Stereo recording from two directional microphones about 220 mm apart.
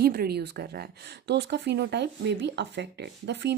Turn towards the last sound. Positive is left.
turn(degrees=-50)  # may be behind; listen again after turning